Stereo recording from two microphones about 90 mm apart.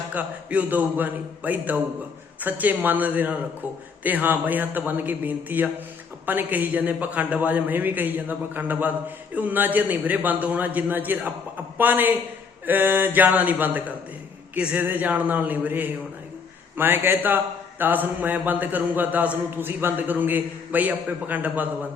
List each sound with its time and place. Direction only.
0.1 s a man's voice: 15° right (ahead or behind)